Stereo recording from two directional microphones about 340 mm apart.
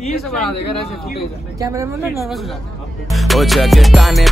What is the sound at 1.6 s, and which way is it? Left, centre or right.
Speech, centre.